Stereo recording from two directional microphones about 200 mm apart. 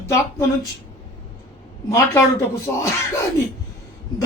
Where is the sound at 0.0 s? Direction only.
15° left (ahead or behind).